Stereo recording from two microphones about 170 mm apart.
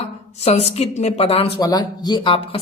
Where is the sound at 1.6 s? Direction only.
25° left (ahead or behind).